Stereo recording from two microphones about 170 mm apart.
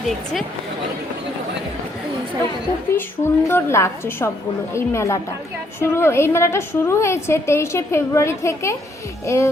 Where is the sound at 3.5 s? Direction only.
15° left (ahead or behind).